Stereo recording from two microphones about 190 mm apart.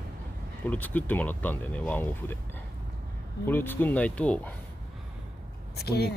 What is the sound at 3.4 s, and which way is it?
Speech, 10° left (ahead or behind).